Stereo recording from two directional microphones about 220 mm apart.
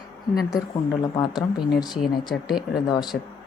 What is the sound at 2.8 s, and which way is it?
Speech, 20° left (ahead or behind).